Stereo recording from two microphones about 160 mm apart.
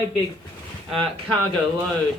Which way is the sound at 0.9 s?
5° left (ahead or behind).